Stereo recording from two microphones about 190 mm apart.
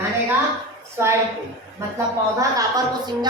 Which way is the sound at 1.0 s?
10° right (ahead or behind).